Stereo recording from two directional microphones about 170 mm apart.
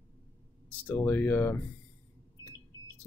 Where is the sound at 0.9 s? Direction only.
10° left (ahead or behind).